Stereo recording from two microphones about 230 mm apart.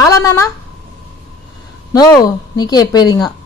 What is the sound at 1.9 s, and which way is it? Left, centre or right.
Speech, centre.